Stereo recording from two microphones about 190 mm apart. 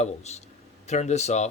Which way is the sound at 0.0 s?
35° left (ahead or behind).